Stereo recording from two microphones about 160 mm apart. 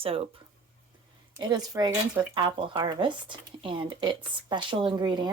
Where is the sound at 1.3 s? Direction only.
25° right (ahead or behind).